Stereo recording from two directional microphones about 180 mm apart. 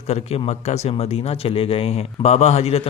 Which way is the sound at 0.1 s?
35° left (ahead or behind).